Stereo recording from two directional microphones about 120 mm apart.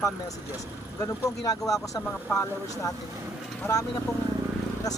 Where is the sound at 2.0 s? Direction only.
15° left (ahead or behind).